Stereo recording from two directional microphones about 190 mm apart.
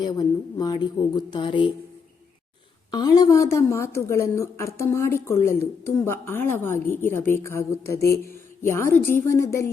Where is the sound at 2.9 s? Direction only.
20° left (ahead or behind).